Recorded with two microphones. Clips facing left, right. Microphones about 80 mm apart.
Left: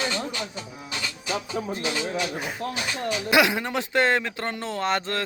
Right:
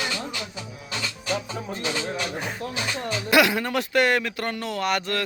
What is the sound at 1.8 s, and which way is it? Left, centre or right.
Speech, centre.